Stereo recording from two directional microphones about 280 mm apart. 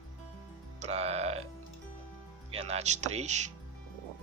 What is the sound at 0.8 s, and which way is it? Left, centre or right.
Speech, right.